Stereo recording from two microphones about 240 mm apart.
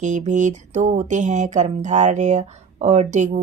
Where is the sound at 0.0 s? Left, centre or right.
Right.